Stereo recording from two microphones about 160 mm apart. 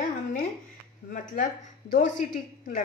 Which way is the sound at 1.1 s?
55° left (ahead or behind).